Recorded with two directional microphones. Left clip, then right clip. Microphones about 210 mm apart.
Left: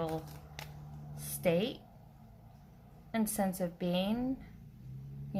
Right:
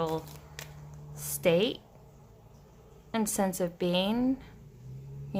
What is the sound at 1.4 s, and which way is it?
Speech, 30° right (ahead or behind).